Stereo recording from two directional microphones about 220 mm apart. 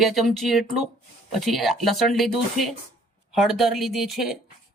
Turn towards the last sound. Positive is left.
turn(degrees=0)  # may be behind; listen again after turning